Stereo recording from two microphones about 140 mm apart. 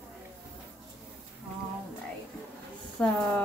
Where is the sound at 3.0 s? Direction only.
10° left (ahead or behind).